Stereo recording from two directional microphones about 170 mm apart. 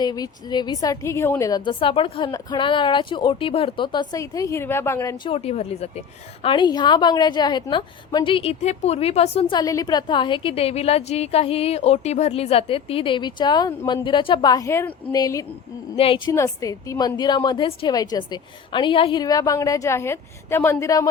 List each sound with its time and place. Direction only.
0.0 s a woman's voice: 25° left (ahead or behind)
5.1 s speech: 30° left (ahead or behind)
6.4 s a woman's voice: 30° left (ahead or behind)
9.6 s a woman's voice: 20° left (ahead or behind)
16.3 s a woman's voice: 20° left (ahead or behind)